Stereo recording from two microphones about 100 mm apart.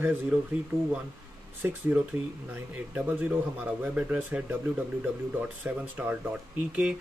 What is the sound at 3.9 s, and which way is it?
Speech, 15° right (ahead or behind).